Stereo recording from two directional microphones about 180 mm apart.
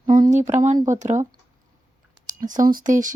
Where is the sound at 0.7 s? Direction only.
15° right (ahead or behind).